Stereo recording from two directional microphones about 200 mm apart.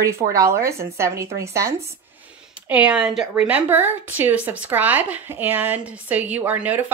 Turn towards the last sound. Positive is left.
turn(degrees=-10)  # may be behind; listen again after turning